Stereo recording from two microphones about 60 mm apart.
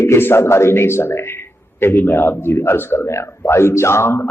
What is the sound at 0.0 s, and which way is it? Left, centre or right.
A man's voice, left.